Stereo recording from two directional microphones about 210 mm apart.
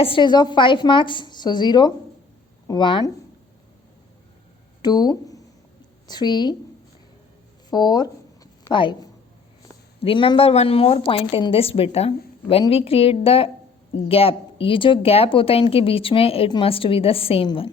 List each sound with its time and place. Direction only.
0.0 s a woman's voice: 25° left (ahead or behind)
4.8 s a woman's voice: 20° left (ahead or behind)
7.7 s a woman's voice: 20° left (ahead or behind)